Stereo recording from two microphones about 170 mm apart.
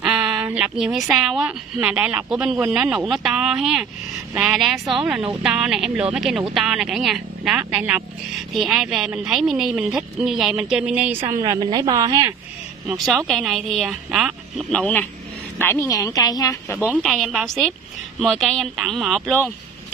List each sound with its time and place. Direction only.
0.0 s speech: 5° right (ahead or behind); by 12.4 s 20° right (ahead or behind)
12.8 s speech: centre (ahead or behind); by 16.8 s 20° left (ahead or behind)
16.9 s speech: centre (ahead or behind)